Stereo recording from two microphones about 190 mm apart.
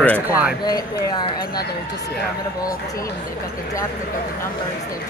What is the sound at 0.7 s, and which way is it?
Speech, 20° left (ahead or behind).